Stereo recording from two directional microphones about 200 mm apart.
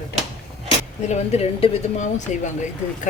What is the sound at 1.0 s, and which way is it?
Speech, 35° left (ahead or behind).